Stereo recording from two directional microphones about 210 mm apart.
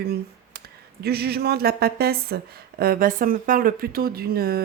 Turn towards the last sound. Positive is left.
turn(degrees=-45)  # may be behind; listen again after turning